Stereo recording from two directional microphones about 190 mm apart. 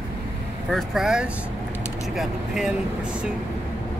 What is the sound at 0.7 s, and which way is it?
Speech, 5° right (ahead or behind).